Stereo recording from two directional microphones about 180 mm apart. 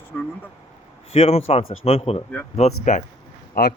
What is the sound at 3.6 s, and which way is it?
Speech, 55° left (ahead or behind).